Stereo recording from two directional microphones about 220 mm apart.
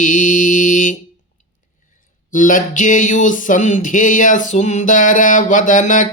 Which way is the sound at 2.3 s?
35° left (ahead or behind).